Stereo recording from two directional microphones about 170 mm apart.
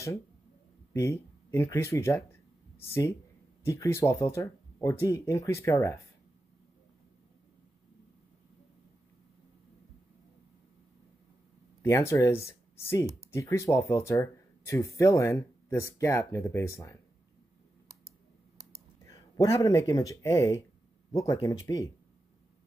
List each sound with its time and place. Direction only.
0.9 s speech: 15° left (ahead or behind)
11.8 s speech: 15° left (ahead or behind)
19.0 s speech: 20° left (ahead or behind)